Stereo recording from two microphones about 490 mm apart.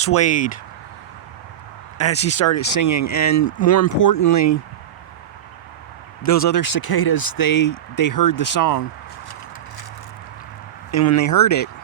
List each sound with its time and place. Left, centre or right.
0.0 s speech: left
2.3 s speech: left
6.2 s speech: left
10.9 s speech: left